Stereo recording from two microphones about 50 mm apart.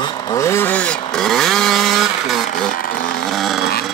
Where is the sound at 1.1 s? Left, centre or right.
Centre.